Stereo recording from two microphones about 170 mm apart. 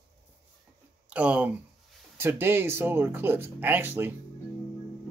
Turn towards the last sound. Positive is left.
turn(degrees=-10)  # may be behind; listen again after turning